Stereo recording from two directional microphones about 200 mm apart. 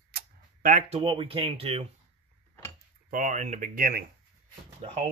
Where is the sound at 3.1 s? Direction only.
40° right (ahead or behind).